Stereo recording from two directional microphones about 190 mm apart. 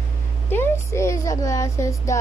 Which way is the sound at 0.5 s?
15° left (ahead or behind).